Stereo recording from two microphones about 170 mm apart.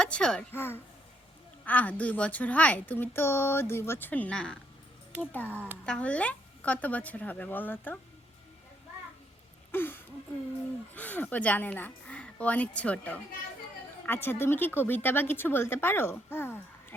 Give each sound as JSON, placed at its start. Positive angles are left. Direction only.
{"t": 0.0, "sound": "speech", "side_deg": 5}
{"t": 9.7, "sound": "speech", "side_deg": 10}